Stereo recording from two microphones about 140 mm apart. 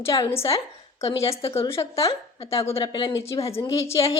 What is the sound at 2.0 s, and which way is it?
A woman's voice, 45° left (ahead or behind).